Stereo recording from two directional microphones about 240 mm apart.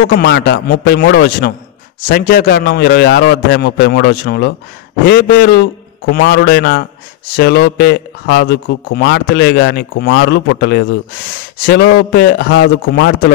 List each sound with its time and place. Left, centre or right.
0.0 s a man's voice: left